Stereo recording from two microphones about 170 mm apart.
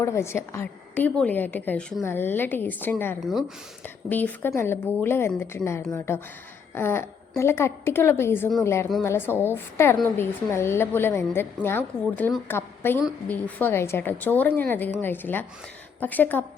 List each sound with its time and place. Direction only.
0.0 s a woman's voice: 15° left (ahead or behind)